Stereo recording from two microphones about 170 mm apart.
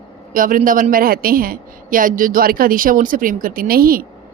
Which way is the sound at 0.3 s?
55° right (ahead or behind).